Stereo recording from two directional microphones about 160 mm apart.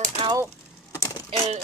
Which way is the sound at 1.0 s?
20° left (ahead or behind).